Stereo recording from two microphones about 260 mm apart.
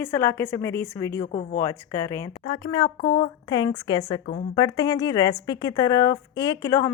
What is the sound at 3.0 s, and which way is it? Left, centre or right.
Speech, left.